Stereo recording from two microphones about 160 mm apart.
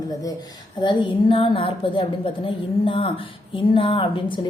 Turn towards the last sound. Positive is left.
turn(degrees=30)  # may be behind; listen again after turning